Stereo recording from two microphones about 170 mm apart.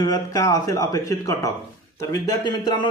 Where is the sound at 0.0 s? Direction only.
25° left (ahead or behind).